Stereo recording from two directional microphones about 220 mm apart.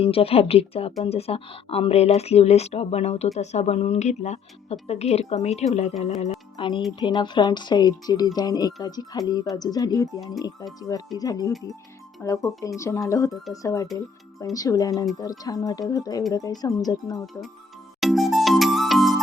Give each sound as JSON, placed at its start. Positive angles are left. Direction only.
{"t": 0.0, "sound": "speech", "side_deg": 25}
{"t": 13.8, "sound": "speech", "side_deg": 0}
{"t": 14.5, "sound": "speech", "side_deg": 15}
{"t": 18.0, "sound": "music", "side_deg": 0}